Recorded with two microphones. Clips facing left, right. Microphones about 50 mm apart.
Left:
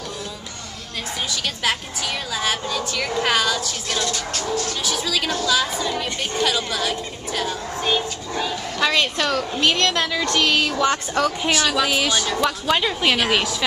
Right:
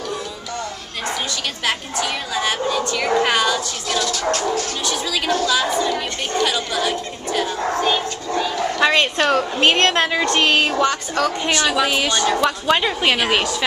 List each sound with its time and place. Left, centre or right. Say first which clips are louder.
1.6 s a woman's voice: right 3 dB; centre
4.8 s a woman's voice: right 2 dB; centre
8.7 s a woman's voice: right 3 dB; right
11.2 s a woman's voice: right 2 dB; centre